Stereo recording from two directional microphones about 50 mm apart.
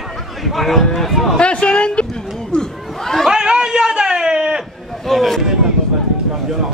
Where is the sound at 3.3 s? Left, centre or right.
Centre.